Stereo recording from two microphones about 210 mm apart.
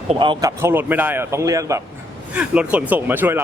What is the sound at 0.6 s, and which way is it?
A man's voice, 10° right (ahead or behind).